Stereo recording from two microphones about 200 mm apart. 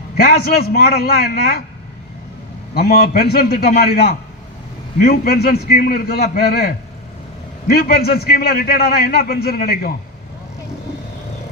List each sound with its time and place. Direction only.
0.2 s a man's voice: 50° left (ahead or behind)
2.7 s a man's voice: 50° left (ahead or behind)